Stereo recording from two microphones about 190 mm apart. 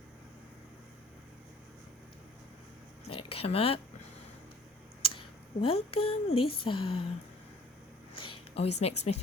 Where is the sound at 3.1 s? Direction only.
30° left (ahead or behind).